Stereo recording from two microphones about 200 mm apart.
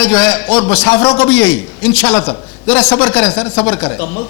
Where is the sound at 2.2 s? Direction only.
25° left (ahead or behind).